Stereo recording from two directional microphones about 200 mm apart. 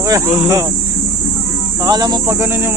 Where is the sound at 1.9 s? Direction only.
20° right (ahead or behind).